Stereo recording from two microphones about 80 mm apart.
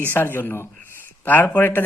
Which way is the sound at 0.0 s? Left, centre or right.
Left.